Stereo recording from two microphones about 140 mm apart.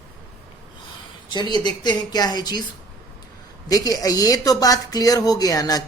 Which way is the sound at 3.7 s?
25° left (ahead or behind).